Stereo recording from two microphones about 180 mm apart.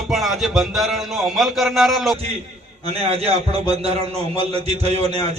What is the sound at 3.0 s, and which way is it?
A man's voice, 35° right (ahead or behind).